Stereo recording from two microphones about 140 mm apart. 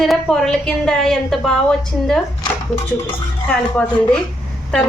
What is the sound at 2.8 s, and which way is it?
Speech, 15° left (ahead or behind).